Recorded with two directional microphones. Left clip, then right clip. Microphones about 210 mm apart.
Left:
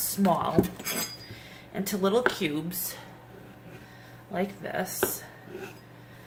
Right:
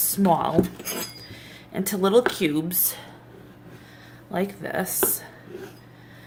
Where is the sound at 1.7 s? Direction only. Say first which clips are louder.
Right 6 dB; 45° right (ahead or behind).